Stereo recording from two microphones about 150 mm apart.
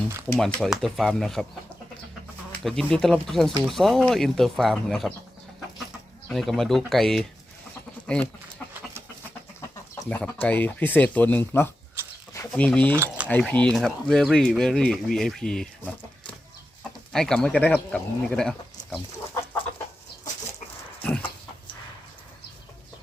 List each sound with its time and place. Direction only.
0.3 s speech: centre (ahead or behind)
2.5 s speech: 5° left (ahead or behind)
6.2 s speech: centre (ahead or behind)
8.0 s goat: 5° left (ahead or behind)
10.1 s speech: 10° left (ahead or behind)
12.0 s a sound: 15° right (ahead or behind)
12.5 s speech: 10° left (ahead or behind)
17.1 s speech: 5° left (ahead or behind)
21.0 s a sound: 10° left (ahead or behind)